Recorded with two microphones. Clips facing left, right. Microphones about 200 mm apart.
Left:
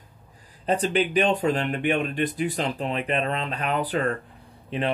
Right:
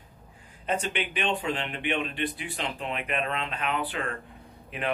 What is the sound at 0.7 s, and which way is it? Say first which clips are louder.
Speech: left 7 dB; 35° left (ahead or behind).